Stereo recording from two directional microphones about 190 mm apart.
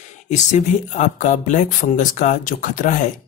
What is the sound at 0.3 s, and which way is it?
Speech, 40° left (ahead or behind).